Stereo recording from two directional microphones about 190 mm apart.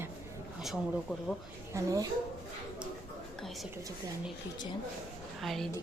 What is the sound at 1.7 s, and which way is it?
Speech, 15° right (ahead or behind).